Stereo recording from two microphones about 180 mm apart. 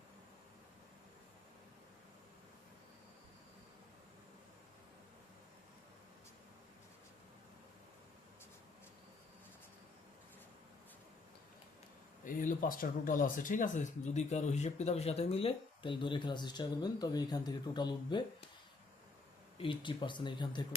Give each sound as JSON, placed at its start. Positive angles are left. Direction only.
{"t": 12.2, "sound": "speech", "side_deg": 45}
{"t": 19.5, "sound": "speech", "side_deg": 25}